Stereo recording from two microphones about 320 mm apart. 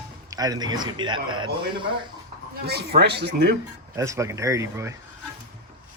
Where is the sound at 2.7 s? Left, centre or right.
Right.